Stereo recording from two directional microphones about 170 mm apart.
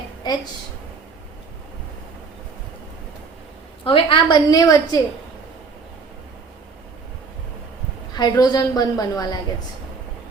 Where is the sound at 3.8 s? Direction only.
30° left (ahead or behind).